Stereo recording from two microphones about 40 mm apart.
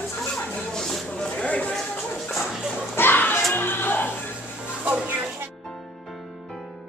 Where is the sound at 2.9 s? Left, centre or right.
Left.